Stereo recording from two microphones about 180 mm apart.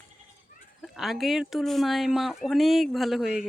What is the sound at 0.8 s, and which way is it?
Speech, centre (ahead or behind).